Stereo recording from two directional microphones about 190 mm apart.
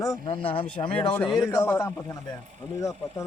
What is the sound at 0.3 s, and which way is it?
Speech, 30° left (ahead or behind).